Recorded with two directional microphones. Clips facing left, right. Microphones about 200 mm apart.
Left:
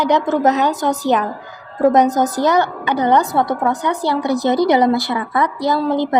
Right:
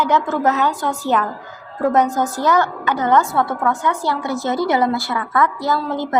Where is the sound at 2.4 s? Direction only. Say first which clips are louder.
Left 2 dB; 15° left (ahead or behind).